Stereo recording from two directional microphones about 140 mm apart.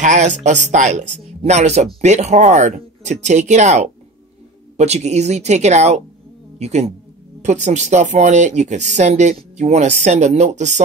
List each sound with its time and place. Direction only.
0.0 s speech: 60° right (ahead or behind)